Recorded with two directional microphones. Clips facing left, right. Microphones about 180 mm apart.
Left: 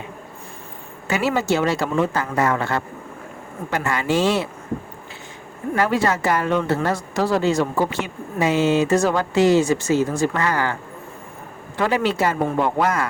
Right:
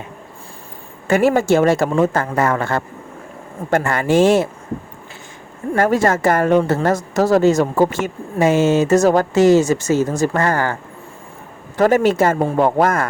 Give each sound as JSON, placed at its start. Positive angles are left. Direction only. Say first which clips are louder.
{"t": 1.0, "sound": "speech", "louder": "right 6 dB", "side_deg": -50}
{"t": 5.7, "sound": "speech", "louder": "right 4 dB", "side_deg": -45}
{"t": 11.8, "sound": "speech", "louder": "right 6 dB", "side_deg": -45}